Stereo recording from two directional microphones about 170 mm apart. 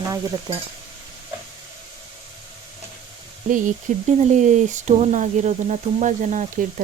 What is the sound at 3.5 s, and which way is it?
Speech, 50° right (ahead or behind).